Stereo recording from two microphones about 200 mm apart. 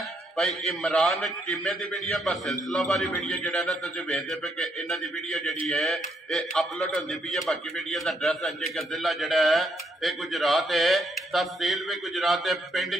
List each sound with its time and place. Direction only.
0.4 s a man's voice: centre (ahead or behind)